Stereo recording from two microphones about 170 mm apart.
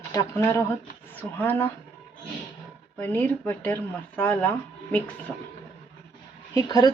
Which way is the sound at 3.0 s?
10° left (ahead or behind).